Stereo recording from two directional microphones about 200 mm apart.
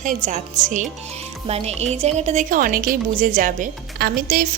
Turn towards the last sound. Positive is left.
turn(degrees=-45)  # may be behind; listen again after turning